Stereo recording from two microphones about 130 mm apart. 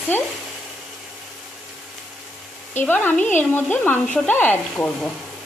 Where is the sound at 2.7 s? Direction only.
15° left (ahead or behind).